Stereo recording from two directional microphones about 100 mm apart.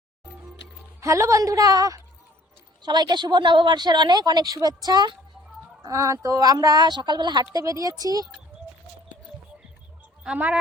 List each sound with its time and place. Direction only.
1.0 s speech: 30° right (ahead or behind)
5.8 s speech: 35° right (ahead or behind)
7.5 s speech: 35° right (ahead or behind)
10.2 s speech: 10° right (ahead or behind)